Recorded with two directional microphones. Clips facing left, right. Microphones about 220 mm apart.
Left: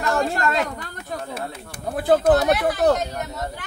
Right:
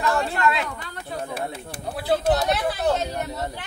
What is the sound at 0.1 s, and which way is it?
Chatter, 40° left (ahead or behind).